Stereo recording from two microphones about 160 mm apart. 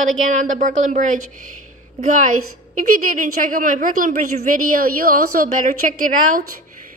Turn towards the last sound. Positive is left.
turn(degrees=-60)  # may be behind; listen again after turning